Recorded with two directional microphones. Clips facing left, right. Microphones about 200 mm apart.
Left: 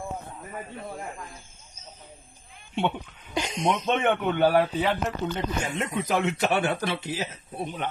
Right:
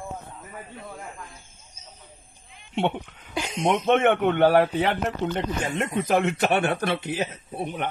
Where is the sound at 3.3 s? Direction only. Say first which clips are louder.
Right 1 dB; 5° right (ahead or behind).